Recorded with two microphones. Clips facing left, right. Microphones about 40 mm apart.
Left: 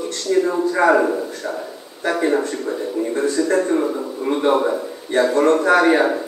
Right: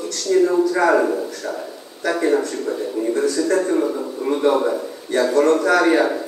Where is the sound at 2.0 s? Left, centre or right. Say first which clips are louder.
Even; left.